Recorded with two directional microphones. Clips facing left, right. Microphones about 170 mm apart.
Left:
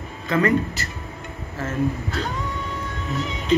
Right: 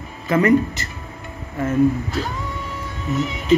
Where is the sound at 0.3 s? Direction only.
20° right (ahead or behind).